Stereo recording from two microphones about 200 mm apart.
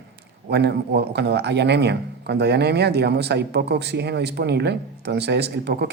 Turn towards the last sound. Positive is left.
turn(degrees=-55)  # may be behind; listen again after turning